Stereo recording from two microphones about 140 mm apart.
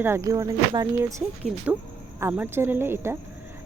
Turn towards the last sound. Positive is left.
turn(degrees=-15)  # may be behind; listen again after turning